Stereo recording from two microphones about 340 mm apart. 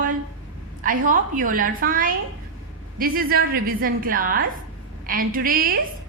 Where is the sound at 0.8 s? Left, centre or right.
Right.